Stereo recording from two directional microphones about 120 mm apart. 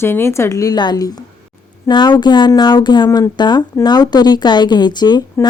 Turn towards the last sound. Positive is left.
turn(degrees=35)  # may be behind; listen again after turning